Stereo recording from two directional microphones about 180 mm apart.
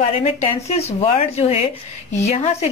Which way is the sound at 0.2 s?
35° left (ahead or behind).